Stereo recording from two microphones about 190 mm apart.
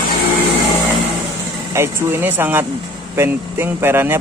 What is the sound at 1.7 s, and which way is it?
Speech, 15° right (ahead or behind).